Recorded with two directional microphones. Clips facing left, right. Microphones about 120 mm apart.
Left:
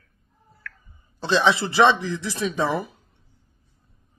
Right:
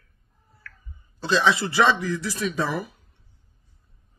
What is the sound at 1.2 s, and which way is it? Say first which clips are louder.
Speech: left 1 dB; 25° left (ahead or behind).